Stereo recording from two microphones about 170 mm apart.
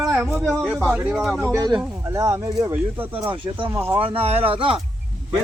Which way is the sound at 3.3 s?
30° right (ahead or behind).